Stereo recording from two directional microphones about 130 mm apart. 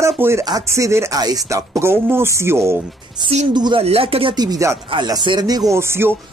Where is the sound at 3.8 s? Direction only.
50° right (ahead or behind).